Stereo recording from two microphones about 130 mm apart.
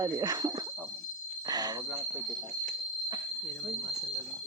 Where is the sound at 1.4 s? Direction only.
30° right (ahead or behind).